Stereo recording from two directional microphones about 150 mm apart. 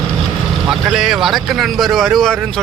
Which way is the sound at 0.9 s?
5° right (ahead or behind).